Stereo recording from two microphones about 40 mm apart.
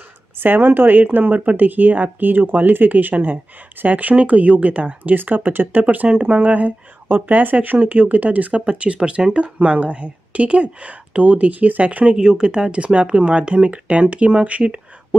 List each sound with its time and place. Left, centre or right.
0.4 s speech: right
5.0 s speech: right
5.7 s speech: right
6.0 s speech: right
6.4 s speech: right
12.2 s speech: centre